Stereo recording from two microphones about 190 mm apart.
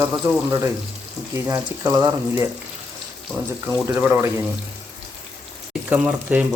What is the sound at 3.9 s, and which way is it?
Speech, 10° right (ahead or behind).